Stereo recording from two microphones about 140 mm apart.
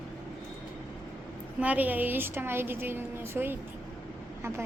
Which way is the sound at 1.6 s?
10° right (ahead or behind).